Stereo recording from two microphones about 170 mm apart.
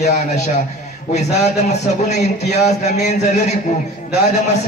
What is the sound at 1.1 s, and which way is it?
A man's voice, 40° left (ahead or behind).